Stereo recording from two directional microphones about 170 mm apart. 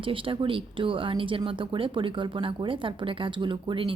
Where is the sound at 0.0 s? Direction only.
30° right (ahead or behind).